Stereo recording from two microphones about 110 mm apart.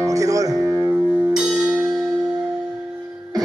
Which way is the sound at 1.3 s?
5° right (ahead or behind).